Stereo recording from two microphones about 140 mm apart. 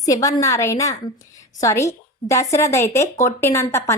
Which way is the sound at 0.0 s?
25° left (ahead or behind).